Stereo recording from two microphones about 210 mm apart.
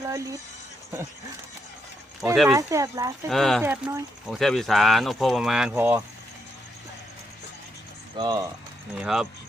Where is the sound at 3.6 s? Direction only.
10° right (ahead or behind).